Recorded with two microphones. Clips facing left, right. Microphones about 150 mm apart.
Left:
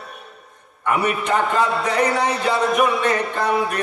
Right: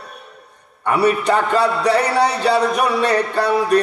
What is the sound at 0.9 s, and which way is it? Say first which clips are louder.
A man's voice: right 5 dB; 35° right (ahead or behind).